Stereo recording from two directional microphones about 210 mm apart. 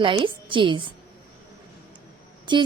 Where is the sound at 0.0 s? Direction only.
25° right (ahead or behind).